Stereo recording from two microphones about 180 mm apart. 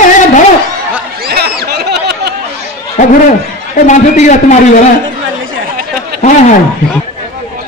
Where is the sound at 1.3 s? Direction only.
65° right (ahead or behind).